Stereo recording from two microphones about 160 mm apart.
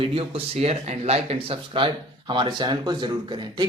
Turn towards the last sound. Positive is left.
turn(degrees=-30)  # may be behind; listen again after turning